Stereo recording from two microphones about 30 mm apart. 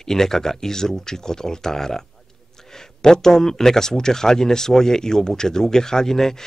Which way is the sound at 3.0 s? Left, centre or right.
Centre.